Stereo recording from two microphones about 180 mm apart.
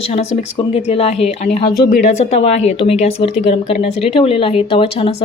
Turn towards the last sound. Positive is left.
turn(degrees=30)  # may be behind; listen again after turning